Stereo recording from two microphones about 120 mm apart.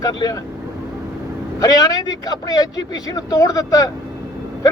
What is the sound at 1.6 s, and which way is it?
A man's voice, 30° left (ahead or behind).